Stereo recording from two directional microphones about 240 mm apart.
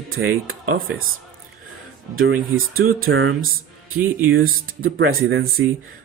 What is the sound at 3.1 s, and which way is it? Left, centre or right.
Speech, right.